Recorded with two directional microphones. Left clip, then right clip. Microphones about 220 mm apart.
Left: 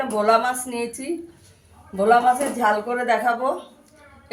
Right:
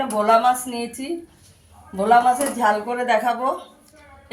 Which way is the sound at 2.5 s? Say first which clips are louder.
Right 1 dB; 20° left (ahead or behind).